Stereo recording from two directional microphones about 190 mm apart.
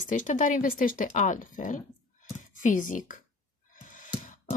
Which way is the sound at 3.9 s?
45° left (ahead or behind).